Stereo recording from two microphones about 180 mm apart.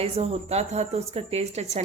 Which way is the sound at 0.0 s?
35° right (ahead or behind).